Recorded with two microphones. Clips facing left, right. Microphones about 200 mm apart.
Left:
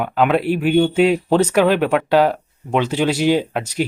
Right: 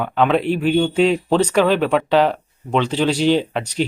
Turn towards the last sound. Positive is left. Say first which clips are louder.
# even
turn(degrees=10)  # may be behind; listen again after turning